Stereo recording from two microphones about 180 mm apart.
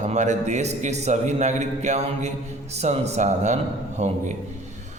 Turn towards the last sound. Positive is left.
turn(degrees=-40)  # may be behind; listen again after turning